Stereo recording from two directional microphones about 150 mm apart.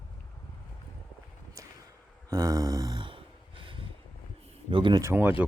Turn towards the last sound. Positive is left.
turn(degrees=-15)  # may be behind; listen again after turning